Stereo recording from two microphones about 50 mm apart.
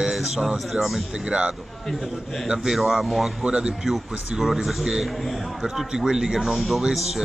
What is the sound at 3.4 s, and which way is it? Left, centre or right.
Speech, centre.